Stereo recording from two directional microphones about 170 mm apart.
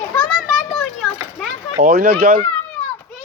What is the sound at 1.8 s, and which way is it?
Speech, 65° right (ahead or behind).